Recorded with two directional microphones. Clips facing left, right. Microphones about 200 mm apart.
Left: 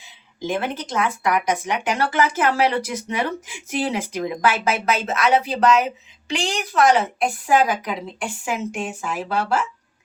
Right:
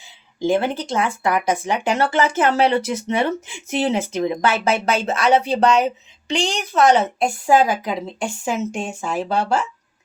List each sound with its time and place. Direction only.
0.4 s speech: 30° right (ahead or behind)